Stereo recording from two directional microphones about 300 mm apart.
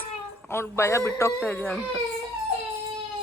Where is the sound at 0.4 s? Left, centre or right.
Centre.